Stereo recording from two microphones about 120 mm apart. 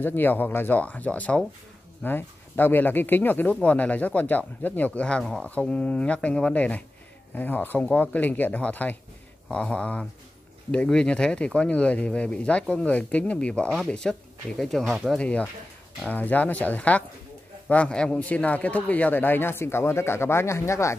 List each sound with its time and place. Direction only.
0.0 s a man's voice: 15° left (ahead or behind)